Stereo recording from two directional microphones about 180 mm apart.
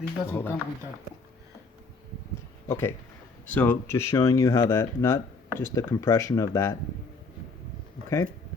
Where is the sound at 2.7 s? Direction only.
15° left (ahead or behind).